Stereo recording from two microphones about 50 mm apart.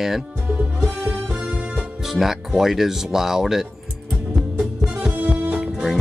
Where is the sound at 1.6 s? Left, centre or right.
Right.